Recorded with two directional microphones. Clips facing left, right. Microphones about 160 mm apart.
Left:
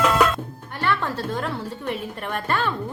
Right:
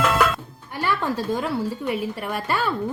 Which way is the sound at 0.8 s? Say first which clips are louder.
Right 1 dB; 10° right (ahead or behind).